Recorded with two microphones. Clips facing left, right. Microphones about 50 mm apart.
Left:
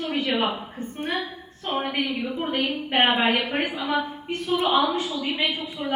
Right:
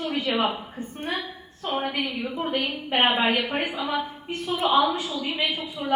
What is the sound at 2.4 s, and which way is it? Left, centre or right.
Speech, centre.